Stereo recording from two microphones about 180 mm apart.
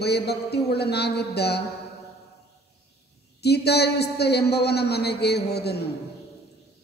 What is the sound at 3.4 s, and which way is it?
A man's voice, 65° left (ahead or behind).